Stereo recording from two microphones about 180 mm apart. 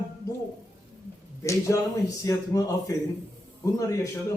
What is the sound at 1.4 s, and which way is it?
A man's voice, 15° left (ahead or behind).